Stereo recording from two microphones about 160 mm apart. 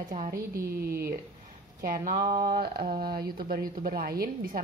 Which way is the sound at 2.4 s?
70° right (ahead or behind).